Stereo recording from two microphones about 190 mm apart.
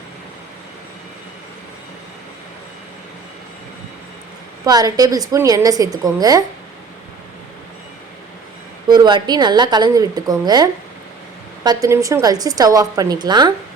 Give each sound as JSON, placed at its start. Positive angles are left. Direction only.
{"t": 4.6, "sound": "a woman's voice", "side_deg": -20}
{"t": 8.9, "sound": "a woman's voice", "side_deg": -20}